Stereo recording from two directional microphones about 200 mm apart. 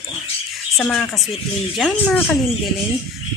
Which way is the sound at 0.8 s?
Centre (ahead or behind).